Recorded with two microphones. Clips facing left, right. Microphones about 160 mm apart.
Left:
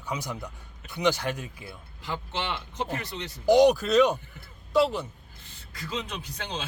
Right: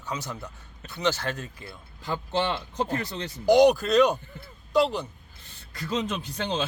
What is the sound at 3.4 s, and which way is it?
Speech, centre (ahead or behind).